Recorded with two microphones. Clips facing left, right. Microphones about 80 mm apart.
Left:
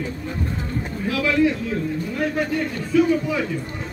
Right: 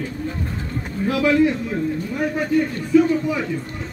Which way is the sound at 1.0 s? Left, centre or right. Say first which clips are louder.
Right 3 dB; right.